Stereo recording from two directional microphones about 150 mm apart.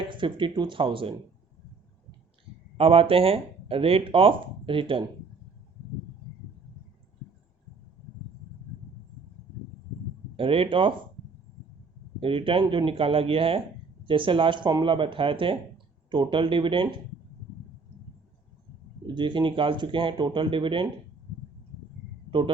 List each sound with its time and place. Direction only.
0.1 s speech: 35° right (ahead or behind)
2.7 s speech: 40° right (ahead or behind)
10.3 s speech: 35° right (ahead or behind)
12.2 s speech: 35° right (ahead or behind)
19.0 s speech: 30° right (ahead or behind)
22.3 s speech: 35° right (ahead or behind)